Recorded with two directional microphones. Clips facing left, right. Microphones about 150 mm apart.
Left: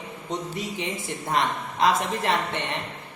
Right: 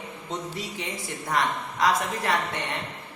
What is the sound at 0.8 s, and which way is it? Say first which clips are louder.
A woman's voice: left 3 dB; 20° left (ahead or behind).